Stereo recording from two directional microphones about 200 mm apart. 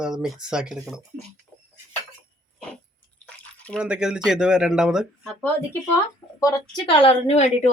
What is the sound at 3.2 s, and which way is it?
Drip, 5° left (ahead or behind).